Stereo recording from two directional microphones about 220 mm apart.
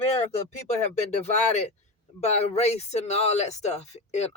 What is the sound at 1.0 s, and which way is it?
Speech, 30° left (ahead or behind).